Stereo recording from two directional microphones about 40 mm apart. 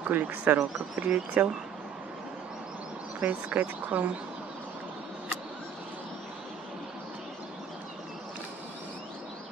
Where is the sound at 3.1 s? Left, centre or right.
Right.